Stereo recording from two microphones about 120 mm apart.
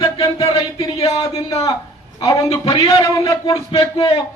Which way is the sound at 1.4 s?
30° left (ahead or behind).